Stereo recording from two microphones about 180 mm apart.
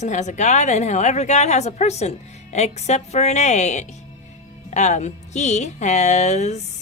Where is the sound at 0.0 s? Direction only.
40° left (ahead or behind).